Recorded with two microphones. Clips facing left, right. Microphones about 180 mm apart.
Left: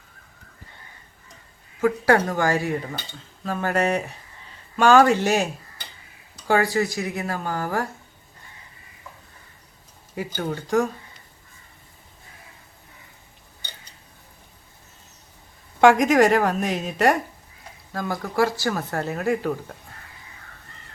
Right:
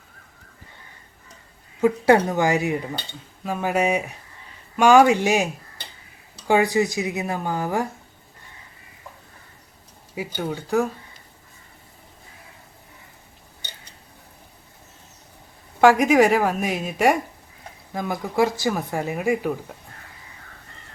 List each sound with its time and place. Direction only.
1.8 s speech: 20° right (ahead or behind)
6.5 s speech: 20° right (ahead or behind)
10.3 s speech: 5° right (ahead or behind)
15.8 s speech: 5° right (ahead or behind)